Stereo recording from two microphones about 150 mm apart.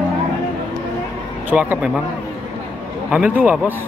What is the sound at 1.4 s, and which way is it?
Speech, 10° right (ahead or behind).